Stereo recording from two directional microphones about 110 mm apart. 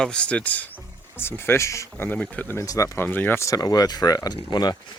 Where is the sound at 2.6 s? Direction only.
30° left (ahead or behind).